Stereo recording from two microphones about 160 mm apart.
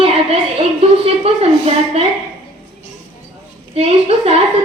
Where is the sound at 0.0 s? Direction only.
40° right (ahead or behind).